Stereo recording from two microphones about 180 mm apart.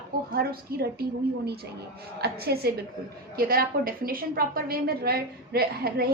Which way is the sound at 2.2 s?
60° right (ahead or behind).